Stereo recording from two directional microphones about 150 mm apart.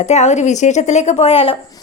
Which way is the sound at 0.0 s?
50° left (ahead or behind).